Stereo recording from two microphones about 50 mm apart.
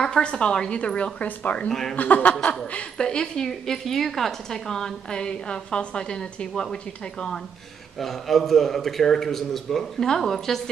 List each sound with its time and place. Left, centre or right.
0.0 s a woman's voice: centre
1.7 s a woman's voice: centre
2.0 s speech: left
3.0 s a woman's voice: centre